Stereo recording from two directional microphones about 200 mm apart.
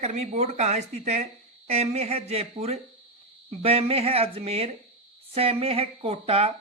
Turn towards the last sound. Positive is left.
turn(degrees=-30)  # may be behind; listen again after turning